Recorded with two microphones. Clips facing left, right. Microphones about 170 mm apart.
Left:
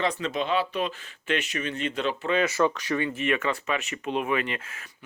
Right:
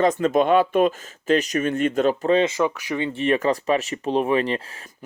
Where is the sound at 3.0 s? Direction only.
30° right (ahead or behind).